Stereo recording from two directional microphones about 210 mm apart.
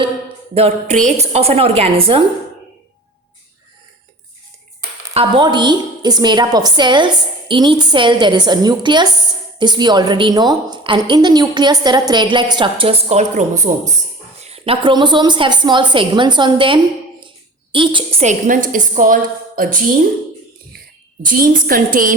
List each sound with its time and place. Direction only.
0.5 s a woman's voice: 30° right (ahead or behind)
5.1 s a woman's voice: 25° right (ahead or behind); by 19.8 s 40° right (ahead or behind)
21.2 s a woman's voice: 40° right (ahead or behind)